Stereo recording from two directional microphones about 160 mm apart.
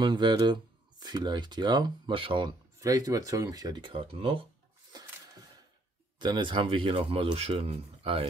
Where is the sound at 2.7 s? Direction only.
20° right (ahead or behind).